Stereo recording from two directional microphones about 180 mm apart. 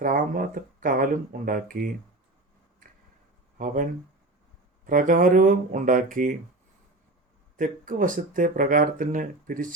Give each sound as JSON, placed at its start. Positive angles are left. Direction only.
{"t": 0.0, "sound": "speech", "side_deg": -50}
{"t": 4.9, "sound": "speech", "side_deg": -45}
{"t": 7.5, "sound": "speech", "side_deg": -50}